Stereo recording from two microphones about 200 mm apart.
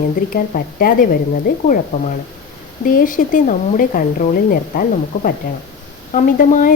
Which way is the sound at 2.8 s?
45° left (ahead or behind).